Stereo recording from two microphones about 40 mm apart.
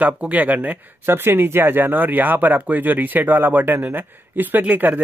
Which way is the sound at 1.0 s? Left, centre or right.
Right.